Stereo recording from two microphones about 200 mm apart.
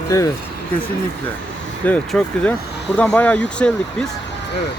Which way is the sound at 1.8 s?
5° left (ahead or behind).